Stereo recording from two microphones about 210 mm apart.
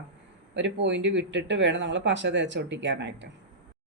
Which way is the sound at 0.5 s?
60° right (ahead or behind).